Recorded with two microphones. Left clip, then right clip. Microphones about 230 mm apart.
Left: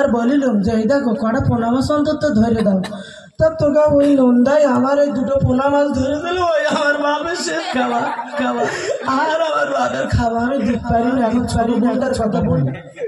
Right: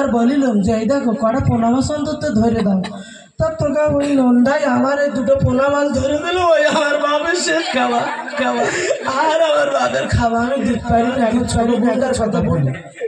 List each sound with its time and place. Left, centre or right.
0.0 s speech: right
4.0 s speech: right
6.3 s speech: right
8.4 s speech: right